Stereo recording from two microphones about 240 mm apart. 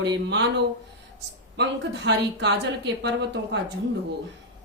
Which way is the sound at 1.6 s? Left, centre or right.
Right.